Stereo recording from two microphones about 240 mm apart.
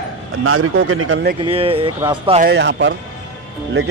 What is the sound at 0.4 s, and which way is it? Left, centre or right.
Speech, right.